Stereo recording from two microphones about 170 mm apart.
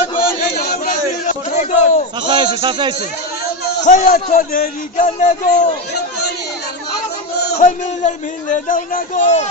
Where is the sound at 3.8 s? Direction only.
50° left (ahead or behind).